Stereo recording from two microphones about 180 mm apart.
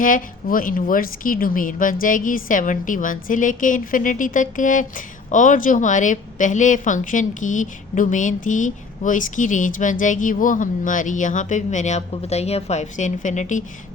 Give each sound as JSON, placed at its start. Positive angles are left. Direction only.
{"t": 0.0, "sound": "a woman's voice", "side_deg": 50}